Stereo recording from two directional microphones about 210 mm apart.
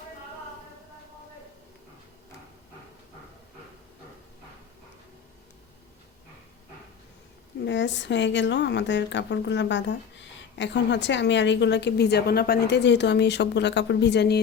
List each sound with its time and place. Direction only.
7.6 s a woman's voice: 60° left (ahead or behind)